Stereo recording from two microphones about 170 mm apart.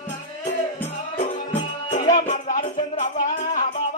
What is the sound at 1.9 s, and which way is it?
Music, 45° left (ahead or behind).